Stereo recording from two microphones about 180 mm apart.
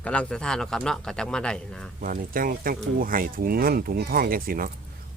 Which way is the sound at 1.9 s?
50° right (ahead or behind).